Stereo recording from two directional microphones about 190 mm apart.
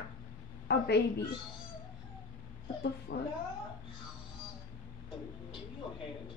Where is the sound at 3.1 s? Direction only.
60° left (ahead or behind).